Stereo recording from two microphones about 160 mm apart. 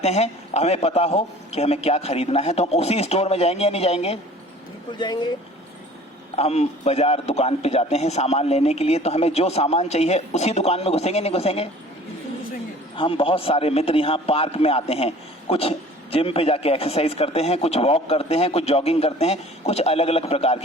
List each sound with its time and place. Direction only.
0.0 s a man's voice: 45° left (ahead or behind)
4.9 s speech: 30° left (ahead or behind)
6.3 s a man's voice: 40° left (ahead or behind)
13.0 s a man's voice: 35° left (ahead or behind)